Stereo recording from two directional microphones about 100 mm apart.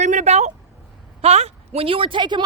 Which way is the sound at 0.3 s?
90° right.